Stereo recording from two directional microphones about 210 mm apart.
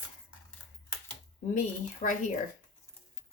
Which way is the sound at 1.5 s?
35° left (ahead or behind).